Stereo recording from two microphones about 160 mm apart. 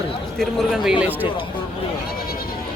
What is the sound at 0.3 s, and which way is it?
Speech, centre (ahead or behind).